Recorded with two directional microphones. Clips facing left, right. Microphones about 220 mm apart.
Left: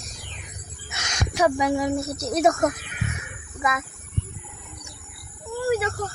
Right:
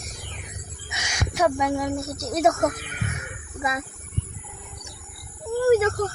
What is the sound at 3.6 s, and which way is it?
Speech, 30° right (ahead or behind).